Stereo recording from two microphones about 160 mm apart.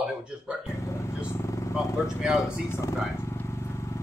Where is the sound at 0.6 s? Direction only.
20° left (ahead or behind).